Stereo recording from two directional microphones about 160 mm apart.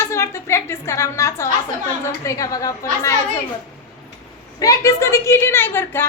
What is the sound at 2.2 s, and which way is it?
Speech, 20° left (ahead or behind).